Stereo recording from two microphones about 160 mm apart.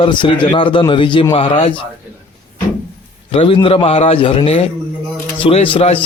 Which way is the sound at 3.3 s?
35° left (ahead or behind).